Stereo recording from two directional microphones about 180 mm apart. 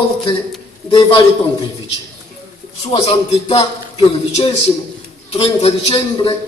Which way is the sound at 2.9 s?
30° left (ahead or behind).